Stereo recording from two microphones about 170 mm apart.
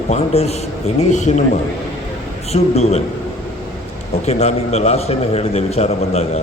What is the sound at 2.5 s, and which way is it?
Speech, 40° left (ahead or behind).